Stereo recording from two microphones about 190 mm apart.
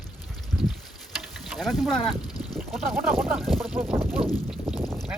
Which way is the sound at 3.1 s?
10° right (ahead or behind).